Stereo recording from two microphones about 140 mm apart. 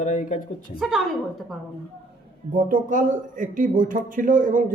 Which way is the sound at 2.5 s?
70° right (ahead or behind).